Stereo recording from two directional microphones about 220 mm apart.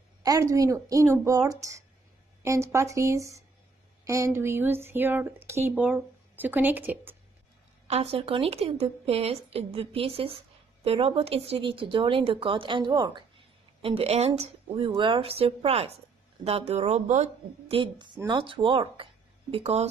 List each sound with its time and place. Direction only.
0.2 s speech: 15° right (ahead or behind)
7.9 s a woman's voice: 30° right (ahead or behind)